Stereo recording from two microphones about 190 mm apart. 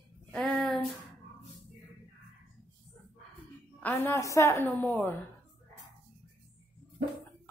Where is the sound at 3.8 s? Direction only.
10° left (ahead or behind).